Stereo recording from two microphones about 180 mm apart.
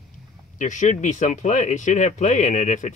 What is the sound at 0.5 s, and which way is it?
Speech, 45° left (ahead or behind).